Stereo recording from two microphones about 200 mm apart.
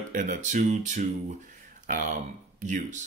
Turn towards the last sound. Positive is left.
turn(degrees=-40)  # may be behind; listen again after turning